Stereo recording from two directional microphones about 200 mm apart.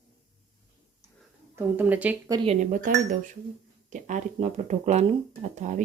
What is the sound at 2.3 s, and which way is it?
Speech, 25° right (ahead or behind).